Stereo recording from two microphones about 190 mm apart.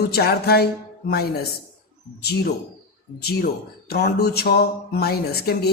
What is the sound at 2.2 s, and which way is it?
Speech, 55° left (ahead or behind).